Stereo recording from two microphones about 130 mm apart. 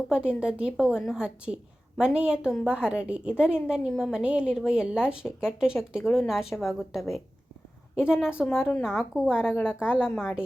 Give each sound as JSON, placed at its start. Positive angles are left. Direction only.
{"t": 0.3, "sound": "a woman's voice", "side_deg": -10}
{"t": 8.4, "sound": "speech", "side_deg": 15}
{"t": 9.0, "sound": "a woman's voice", "side_deg": -5}